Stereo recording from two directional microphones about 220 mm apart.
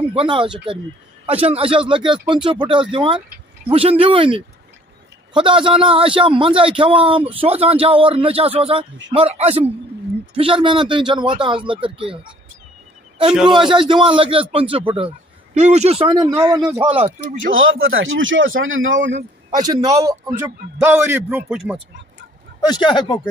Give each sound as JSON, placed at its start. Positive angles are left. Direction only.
{"t": 0.0, "sound": "a man's voice", "side_deg": -25}
{"t": 13.5, "sound": "a man's voice", "side_deg": -20}
{"t": 17.5, "sound": "speech", "side_deg": -65}
{"t": 19.5, "sound": "a man's voice", "side_deg": -15}
{"t": 22.6, "sound": "speech", "side_deg": 20}